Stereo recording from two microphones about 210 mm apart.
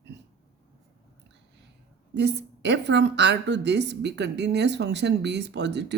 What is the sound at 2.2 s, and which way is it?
A woman's voice, 55° right (ahead or behind).